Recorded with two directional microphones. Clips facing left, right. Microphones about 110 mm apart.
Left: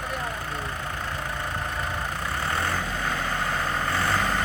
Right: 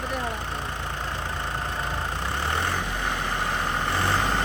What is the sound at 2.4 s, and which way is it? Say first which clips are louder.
Vehicle: even; 25° right (ahead or behind).